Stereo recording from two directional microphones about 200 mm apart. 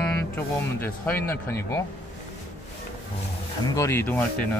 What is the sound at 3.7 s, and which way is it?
Speech, 15° left (ahead or behind).